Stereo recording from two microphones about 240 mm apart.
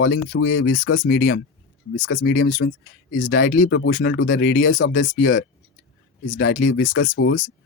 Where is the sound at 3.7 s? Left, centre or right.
Left.